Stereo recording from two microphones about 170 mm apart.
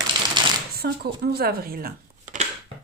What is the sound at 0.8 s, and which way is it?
Speech, 70° right (ahead or behind).